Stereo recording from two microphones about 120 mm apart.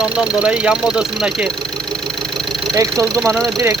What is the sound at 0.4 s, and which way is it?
Speech, 10° right (ahead or behind).